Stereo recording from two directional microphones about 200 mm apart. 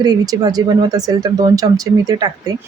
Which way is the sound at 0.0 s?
20° right (ahead or behind).